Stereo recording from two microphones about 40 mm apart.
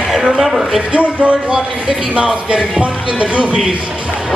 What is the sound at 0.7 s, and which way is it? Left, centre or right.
Speech, right.